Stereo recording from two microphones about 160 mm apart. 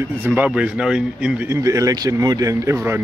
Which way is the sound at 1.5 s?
20° right (ahead or behind).